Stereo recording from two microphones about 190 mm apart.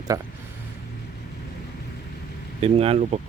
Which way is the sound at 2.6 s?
30° right (ahead or behind).